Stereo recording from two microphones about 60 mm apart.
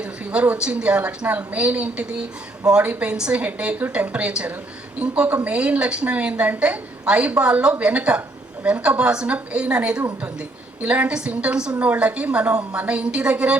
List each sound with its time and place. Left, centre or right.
0.0 s a woman's voice: right